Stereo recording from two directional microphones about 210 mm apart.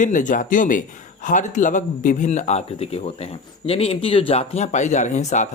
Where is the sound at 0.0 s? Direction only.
35° left (ahead or behind).